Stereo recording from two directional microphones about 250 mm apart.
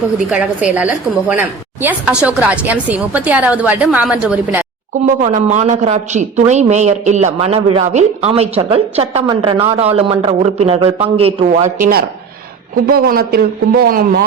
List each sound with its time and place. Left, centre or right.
0.3 s a woman's voice: centre
5.0 s a man's voice: right